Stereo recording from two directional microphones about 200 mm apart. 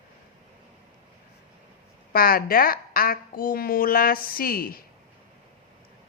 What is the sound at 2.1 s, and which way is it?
A woman's voice, 45° left (ahead or behind).